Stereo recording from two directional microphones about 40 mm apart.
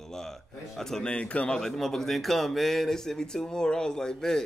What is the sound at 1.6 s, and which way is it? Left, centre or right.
A man's voice, centre.